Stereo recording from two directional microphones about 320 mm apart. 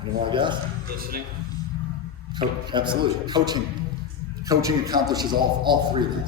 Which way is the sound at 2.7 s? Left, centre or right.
Centre.